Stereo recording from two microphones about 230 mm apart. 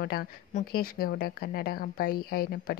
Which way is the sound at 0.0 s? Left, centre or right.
Left.